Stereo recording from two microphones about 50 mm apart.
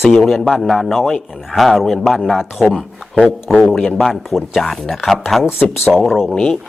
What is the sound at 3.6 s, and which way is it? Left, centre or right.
A man's voice, centre.